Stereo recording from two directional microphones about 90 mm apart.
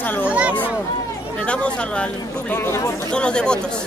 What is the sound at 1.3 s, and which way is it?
Speech, 10° left (ahead or behind).